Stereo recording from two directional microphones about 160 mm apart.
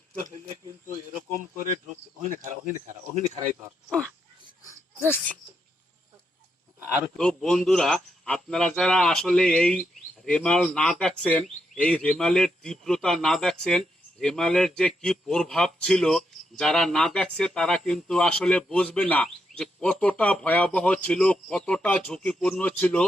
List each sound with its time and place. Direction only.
2.2 s cricket: 50° right (ahead or behind)
3.8 s speech: 5° left (ahead or behind)
6.7 s a man's voice: 5° right (ahead or behind)